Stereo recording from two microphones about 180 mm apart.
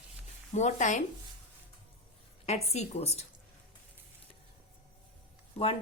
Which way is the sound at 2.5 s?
35° left (ahead or behind).